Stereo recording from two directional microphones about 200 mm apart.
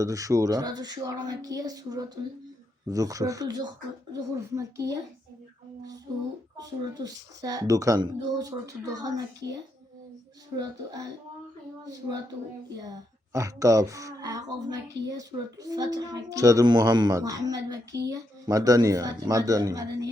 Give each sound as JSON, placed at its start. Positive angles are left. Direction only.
{"t": 0.0, "sound": "a woman's voice", "side_deg": -15}
{"t": 6.6, "sound": "a woman's voice", "side_deg": -20}